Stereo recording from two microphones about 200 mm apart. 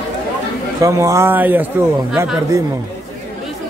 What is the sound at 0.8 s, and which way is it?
A man's voice, 15° right (ahead or behind).